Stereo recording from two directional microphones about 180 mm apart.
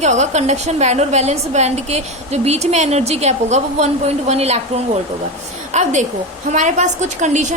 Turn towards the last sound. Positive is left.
turn(degrees=-40)  # may be behind; listen again after turning